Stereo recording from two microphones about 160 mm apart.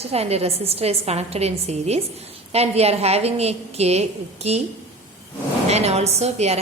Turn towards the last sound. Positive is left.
turn(degrees=-45)  # may be behind; listen again after turning